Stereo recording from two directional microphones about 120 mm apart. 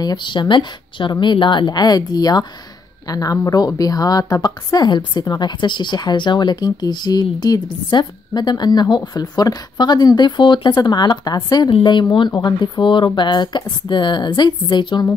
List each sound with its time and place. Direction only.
0.0 s a woman's voice: 40° left (ahead or behind)